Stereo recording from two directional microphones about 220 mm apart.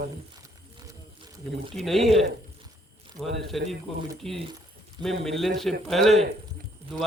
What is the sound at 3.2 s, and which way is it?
Speech, centre (ahead or behind).